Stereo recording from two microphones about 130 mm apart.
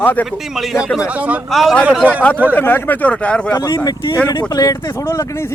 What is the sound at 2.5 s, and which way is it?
Speech, 15° left (ahead or behind).